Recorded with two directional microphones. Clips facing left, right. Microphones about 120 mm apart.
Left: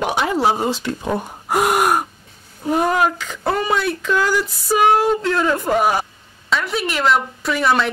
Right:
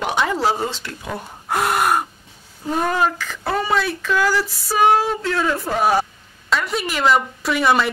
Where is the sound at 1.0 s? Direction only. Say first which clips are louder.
Left 7 dB; 30° left (ahead or behind).